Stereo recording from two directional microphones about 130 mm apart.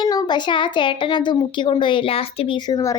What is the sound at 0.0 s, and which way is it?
A woman's voice, 30° left (ahead or behind).